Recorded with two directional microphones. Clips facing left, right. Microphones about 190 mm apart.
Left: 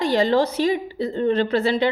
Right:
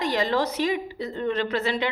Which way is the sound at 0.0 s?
30° left (ahead or behind).